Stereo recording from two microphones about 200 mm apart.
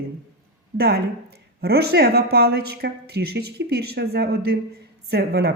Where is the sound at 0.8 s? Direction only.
50° right (ahead or behind).